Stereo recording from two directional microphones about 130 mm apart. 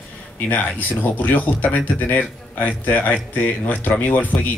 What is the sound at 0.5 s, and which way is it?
Speech, 15° left (ahead or behind).